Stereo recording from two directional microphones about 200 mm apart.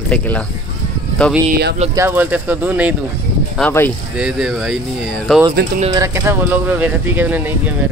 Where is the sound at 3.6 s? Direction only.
10° left (ahead or behind).